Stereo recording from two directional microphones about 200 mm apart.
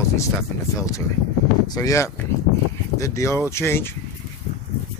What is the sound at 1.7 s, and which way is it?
Speech, 15° left (ahead or behind).